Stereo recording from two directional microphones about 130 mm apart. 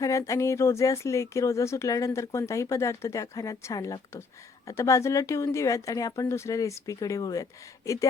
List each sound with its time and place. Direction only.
0.0 s speech: 25° left (ahead or behind)